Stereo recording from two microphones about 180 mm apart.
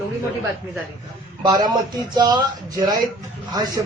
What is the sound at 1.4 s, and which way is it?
Speech, 25° right (ahead or behind).